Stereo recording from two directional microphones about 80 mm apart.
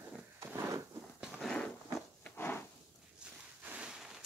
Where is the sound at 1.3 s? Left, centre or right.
Centre.